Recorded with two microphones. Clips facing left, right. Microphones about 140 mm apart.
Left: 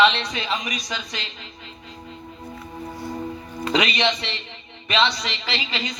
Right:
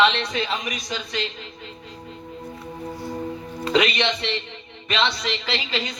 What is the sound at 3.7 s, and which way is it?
A man's voice, 55° right (ahead or behind).